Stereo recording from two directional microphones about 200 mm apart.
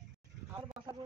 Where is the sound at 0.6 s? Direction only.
25° right (ahead or behind).